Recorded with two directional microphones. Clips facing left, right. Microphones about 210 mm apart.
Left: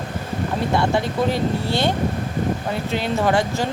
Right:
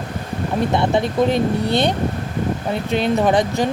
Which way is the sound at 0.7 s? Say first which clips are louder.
Right 2 dB; 20° right (ahead or behind).